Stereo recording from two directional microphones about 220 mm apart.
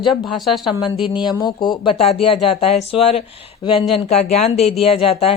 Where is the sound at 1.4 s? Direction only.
20° left (ahead or behind).